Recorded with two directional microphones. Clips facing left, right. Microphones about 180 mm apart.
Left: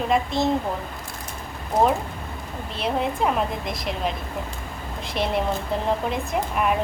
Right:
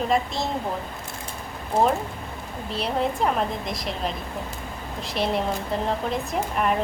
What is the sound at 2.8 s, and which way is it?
A woman's voice, centre (ahead or behind).